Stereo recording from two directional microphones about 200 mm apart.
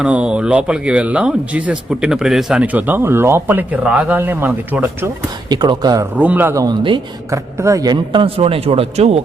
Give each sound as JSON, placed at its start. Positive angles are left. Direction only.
{"t": 0.0, "sound": "speech", "side_deg": -5}
{"t": 5.5, "sound": "speech", "side_deg": -20}
{"t": 6.1, "sound": "speech", "side_deg": -10}